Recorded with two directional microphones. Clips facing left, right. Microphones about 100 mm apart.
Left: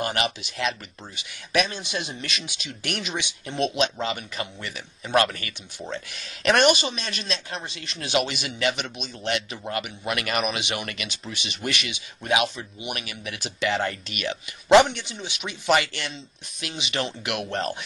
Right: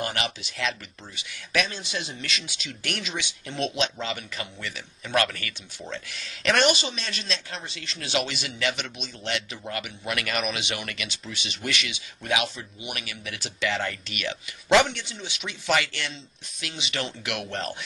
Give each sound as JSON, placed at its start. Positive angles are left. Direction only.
{"t": 0.0, "sound": "speech", "side_deg": 20}